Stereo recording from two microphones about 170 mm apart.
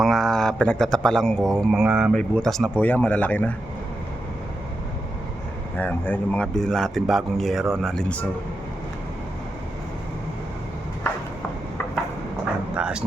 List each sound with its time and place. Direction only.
0.0 s a man's voice: centre (ahead or behind)
5.7 s speech: 10° left (ahead or behind)
12.7 s dog: 5° right (ahead or behind)